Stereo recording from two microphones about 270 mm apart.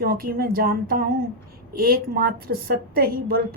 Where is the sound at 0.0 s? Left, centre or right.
Right.